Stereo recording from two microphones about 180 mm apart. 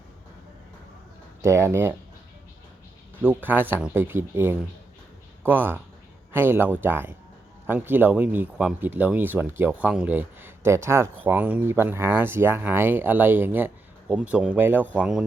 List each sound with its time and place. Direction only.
1.4 s speech: 15° right (ahead or behind)
3.2 s speech: 10° right (ahead or behind)